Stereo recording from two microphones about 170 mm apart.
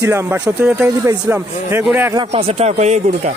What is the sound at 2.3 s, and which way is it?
Speech, 35° right (ahead or behind).